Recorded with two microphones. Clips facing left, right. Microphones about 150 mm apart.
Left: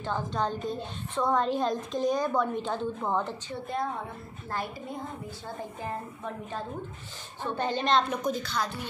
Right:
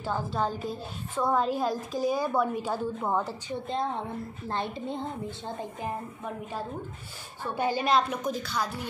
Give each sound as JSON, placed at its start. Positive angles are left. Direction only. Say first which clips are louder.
{"t": 0.0, "sound": "a woman's voice", "louder": "right 1 dB", "side_deg": -10}
{"t": 3.6, "sound": "a woman's voice", "louder": "right 1 dB", "side_deg": -25}